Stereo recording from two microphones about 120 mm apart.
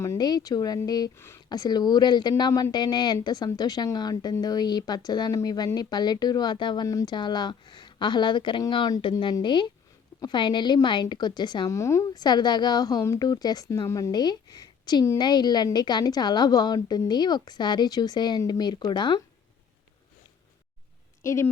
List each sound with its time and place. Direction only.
0.2 s a woman's voice: 35° left (ahead or behind)
21.2 s a woman's voice: 25° left (ahead or behind)